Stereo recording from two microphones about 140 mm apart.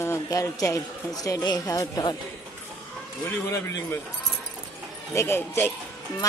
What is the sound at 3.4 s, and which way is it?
Speech, 20° left (ahead or behind).